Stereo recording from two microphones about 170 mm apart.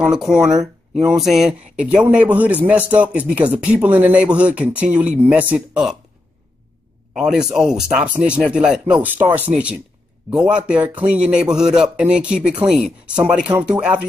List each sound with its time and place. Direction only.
0.0 s speech: 5° right (ahead or behind)
7.2 s speech: 5° right (ahead or behind)